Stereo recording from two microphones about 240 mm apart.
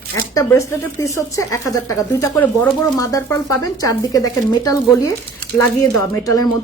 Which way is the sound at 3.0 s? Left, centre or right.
Centre.